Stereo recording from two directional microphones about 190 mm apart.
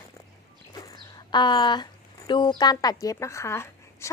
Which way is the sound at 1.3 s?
25° left (ahead or behind).